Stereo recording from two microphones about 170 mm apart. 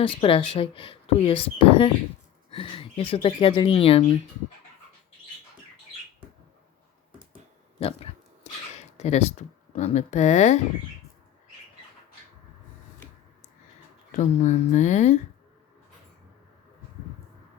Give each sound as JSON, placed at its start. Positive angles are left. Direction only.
{"t": 0.0, "sound": "speech", "side_deg": 30}
{"t": 7.8, "sound": "speech", "side_deg": 35}
{"t": 8.7, "sound": "a sound", "side_deg": 40}
{"t": 9.7, "sound": "speech", "side_deg": 45}
{"t": 14.2, "sound": "speech", "side_deg": 45}